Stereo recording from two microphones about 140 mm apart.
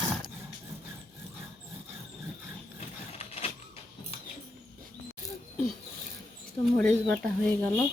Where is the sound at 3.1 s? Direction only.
45° left (ahead or behind).